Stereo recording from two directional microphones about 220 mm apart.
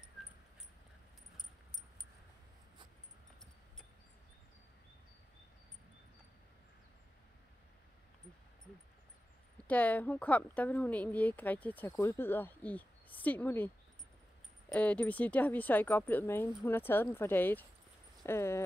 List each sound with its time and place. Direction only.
1.3 s keys jangling: centre (ahead or behind)
9.7 s speech: 5° left (ahead or behind)
14.7 s speech: 5° left (ahead or behind)